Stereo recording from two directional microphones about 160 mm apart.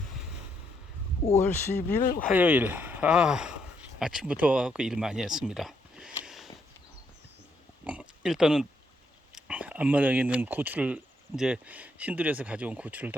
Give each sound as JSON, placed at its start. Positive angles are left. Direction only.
{"t": 1.5, "sound": "speech", "side_deg": 15}
{"t": 2.0, "sound": "speech", "side_deg": 60}
{"t": 2.3, "sound": "speech", "side_deg": -10}
{"t": 6.2, "sound": "a sound", "side_deg": 0}
{"t": 7.9, "sound": "pig", "side_deg": -5}
{"t": 9.3, "sound": "speech", "side_deg": -10}